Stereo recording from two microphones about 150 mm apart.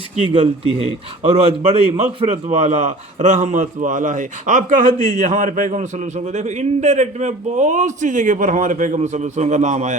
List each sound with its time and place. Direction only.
1.2 s a man's voice: 45° right (ahead or behind)